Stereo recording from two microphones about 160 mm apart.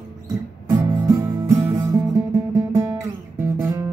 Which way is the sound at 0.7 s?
25° right (ahead or behind).